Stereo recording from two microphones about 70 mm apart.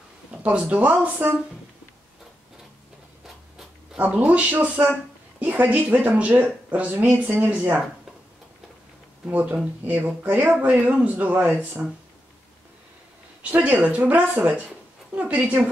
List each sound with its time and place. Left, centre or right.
0.3 s speech: centre
4.0 s speech: centre
9.3 s speech: right
13.4 s speech: right